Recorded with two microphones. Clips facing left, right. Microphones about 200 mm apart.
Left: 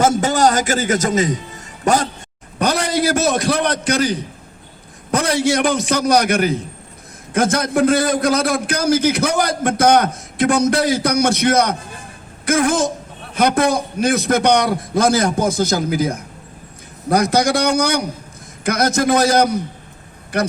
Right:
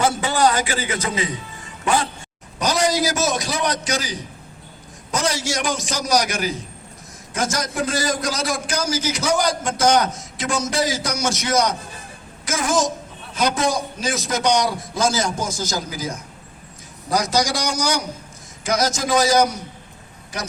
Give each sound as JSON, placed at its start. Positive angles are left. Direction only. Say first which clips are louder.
{"t": 0.0, "sound": "a man's voice", "louder": "left 4 dB", "side_deg": 45}
{"t": 2.6, "sound": "a man's voice", "louder": "left 2 dB", "side_deg": 60}